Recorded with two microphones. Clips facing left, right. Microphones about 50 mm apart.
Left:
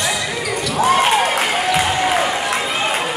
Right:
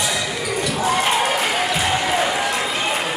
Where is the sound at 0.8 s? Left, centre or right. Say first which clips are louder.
Left 6 dB; left.